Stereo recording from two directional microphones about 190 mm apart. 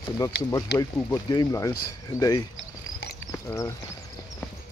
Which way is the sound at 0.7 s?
15° left (ahead or behind).